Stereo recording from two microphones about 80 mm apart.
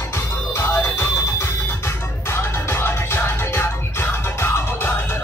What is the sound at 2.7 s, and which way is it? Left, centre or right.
Music, left.